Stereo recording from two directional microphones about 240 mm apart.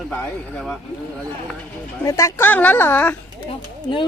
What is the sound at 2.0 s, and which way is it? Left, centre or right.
Speech, centre.